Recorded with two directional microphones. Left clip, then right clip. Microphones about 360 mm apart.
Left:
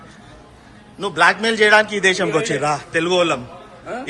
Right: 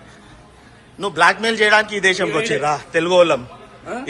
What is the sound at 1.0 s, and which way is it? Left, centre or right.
A man's voice, centre.